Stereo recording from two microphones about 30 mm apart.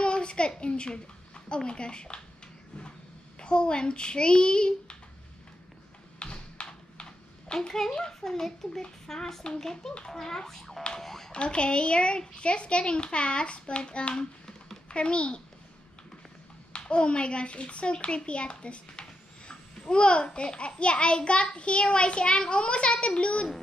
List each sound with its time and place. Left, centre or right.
0.0 s a woman's voice: left
3.3 s a child's voice: left
6.1 s computer keyboard: left
7.5 s a child's voice: centre
11.3 s a child's voice: left
16.7 s a child's voice: left